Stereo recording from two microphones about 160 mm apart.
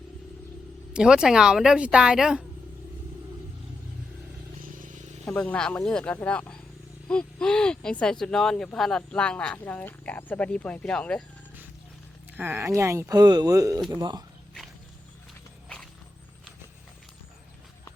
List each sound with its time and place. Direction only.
0.9 s speech: 5° right (ahead or behind)
4.6 s a sound: 55° right (ahead or behind)
5.2 s speech: 5° left (ahead or behind)
12.4 s speech: 15° right (ahead or behind)